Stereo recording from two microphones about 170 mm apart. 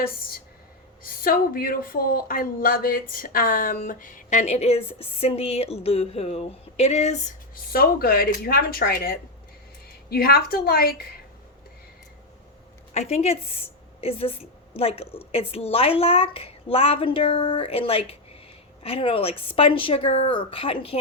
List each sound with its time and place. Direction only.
1.0 s speech: 55° left (ahead or behind); by 7.2 s 40° left (ahead or behind)
7.5 s speech: 60° left (ahead or behind)
12.9 s a woman's voice: 40° left (ahead or behind)